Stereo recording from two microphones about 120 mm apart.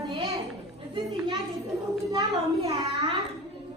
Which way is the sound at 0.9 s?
40° right (ahead or behind).